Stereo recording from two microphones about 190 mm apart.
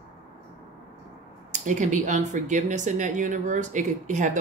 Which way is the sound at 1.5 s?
40° right (ahead or behind).